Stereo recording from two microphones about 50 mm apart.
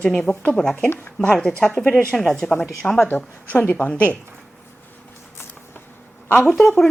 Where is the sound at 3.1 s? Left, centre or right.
Left.